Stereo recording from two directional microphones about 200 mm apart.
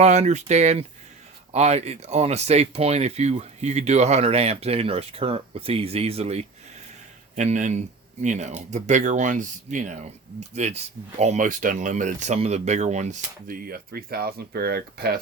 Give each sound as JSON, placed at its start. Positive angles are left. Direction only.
{"t": 0.0, "sound": "speech", "side_deg": -35}